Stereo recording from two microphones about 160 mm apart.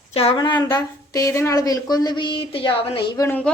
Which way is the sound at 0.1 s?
40° left (ahead or behind).